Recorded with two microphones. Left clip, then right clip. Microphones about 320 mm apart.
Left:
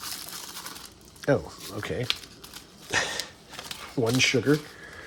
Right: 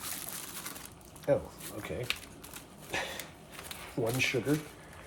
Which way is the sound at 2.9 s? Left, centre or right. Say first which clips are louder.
Left 9 dB; left.